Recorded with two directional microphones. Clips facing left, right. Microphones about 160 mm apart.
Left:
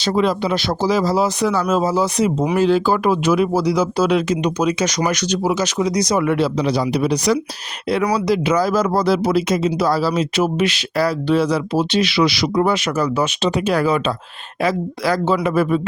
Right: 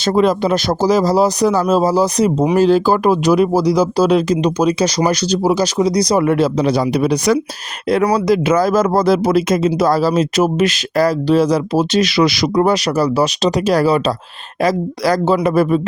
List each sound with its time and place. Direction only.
0.0 s speech: 45° right (ahead or behind)